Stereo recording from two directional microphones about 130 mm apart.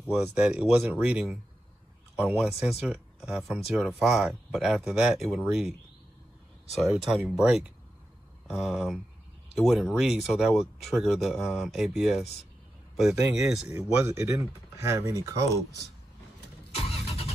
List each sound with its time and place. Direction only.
0.0 s speech: 10° right (ahead or behind)
6.8 s speech: 5° right (ahead or behind)
13.7 s speech: 20° right (ahead or behind)
16.7 s vehicle: 50° left (ahead or behind)